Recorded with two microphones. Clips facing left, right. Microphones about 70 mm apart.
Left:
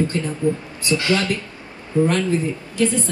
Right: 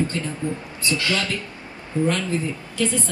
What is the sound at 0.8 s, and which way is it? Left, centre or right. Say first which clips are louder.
A woman's voice: left 4 dB; left.